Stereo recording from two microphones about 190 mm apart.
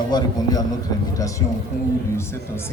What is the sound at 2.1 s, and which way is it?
Speech, 15° left (ahead or behind).